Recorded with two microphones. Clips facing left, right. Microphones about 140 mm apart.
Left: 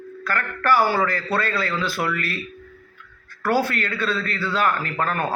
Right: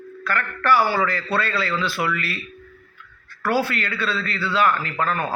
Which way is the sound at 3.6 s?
45° left (ahead or behind).